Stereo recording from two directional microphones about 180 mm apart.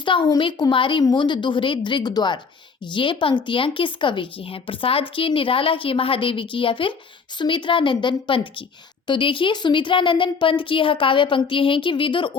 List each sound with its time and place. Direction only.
0.0 s speech: 25° left (ahead or behind)